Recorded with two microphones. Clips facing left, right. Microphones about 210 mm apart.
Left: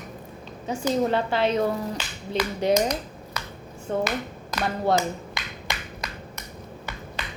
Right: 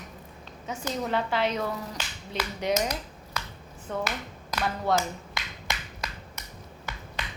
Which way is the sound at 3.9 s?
30° left (ahead or behind).